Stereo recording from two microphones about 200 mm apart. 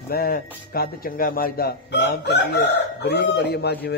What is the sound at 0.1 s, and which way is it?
Speech, 50° left (ahead or behind).